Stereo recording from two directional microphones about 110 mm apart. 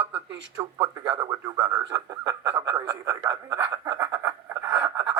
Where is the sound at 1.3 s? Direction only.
35° right (ahead or behind).